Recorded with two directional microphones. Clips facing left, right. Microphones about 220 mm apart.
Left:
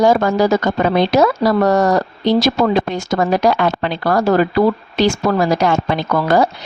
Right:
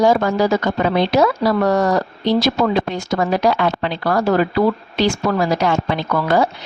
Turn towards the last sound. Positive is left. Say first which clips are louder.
# left 2 dB
turn(degrees=40)  # may be behind; listen again after turning